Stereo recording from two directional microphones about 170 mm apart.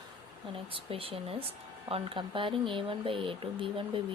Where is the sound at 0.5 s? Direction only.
30° right (ahead or behind).